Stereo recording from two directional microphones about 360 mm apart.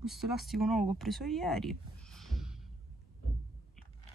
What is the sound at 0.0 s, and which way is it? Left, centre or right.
Speech, centre.